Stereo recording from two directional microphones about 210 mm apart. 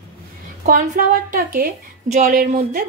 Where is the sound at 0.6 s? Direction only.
40° right (ahead or behind).